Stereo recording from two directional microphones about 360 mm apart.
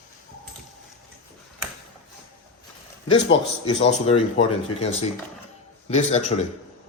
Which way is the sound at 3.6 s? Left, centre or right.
Centre.